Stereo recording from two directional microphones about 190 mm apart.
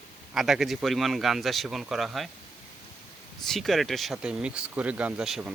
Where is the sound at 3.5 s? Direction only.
Centre (ahead or behind).